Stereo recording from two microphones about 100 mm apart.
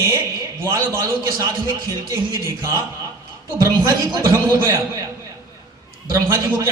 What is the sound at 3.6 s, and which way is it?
A man's voice, 30° right (ahead or behind).